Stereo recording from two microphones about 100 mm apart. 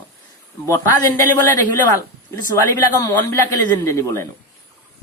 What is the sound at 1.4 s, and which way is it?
Speech, 25° left (ahead or behind).